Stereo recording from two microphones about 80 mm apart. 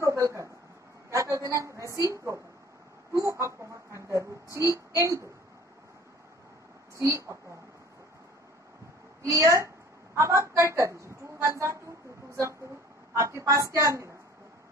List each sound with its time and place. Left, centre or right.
0.0 s a sound: right
1.1 s speech: right
7.0 s speech: right
9.2 s speech: right
13.1 s speech: right